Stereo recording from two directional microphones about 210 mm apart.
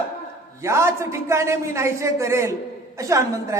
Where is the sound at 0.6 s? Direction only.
15° right (ahead or behind).